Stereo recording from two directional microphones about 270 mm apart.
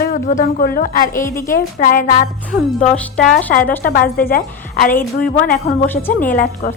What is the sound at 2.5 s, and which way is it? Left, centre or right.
Speech, centre.